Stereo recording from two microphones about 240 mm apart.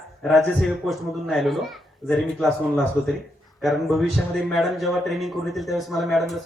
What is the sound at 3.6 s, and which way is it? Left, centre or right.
Speech, centre.